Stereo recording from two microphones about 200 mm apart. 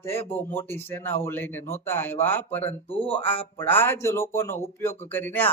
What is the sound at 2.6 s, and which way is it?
Speech, 30° left (ahead or behind).